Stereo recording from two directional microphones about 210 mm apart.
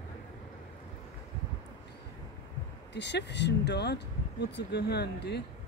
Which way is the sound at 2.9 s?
55° left (ahead or behind).